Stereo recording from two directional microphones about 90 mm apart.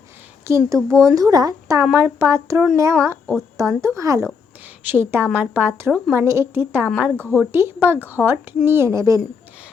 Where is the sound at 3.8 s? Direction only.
35° right (ahead or behind).